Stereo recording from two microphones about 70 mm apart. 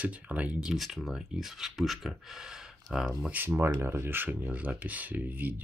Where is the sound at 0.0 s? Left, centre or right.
Right.